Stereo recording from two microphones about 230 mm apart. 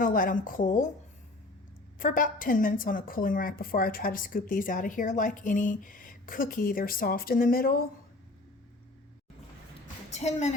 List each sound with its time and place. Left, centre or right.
0.0 s a woman's voice: left
2.0 s a woman's voice: left
10.1 s speech: left